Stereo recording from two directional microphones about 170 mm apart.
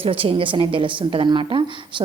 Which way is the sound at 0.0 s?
35° right (ahead or behind).